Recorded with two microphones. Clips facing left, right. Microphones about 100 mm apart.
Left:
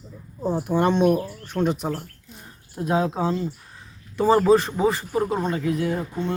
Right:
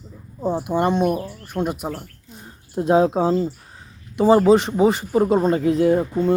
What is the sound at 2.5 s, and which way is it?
Speech, 25° right (ahead or behind).